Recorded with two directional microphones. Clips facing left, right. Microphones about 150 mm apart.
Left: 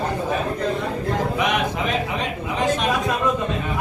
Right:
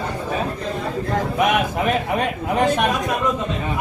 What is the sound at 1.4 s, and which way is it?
A man's voice, 50° right (ahead or behind).